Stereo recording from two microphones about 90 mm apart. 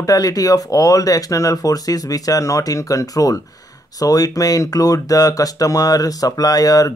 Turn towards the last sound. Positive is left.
turn(degrees=40)  # may be behind; listen again after turning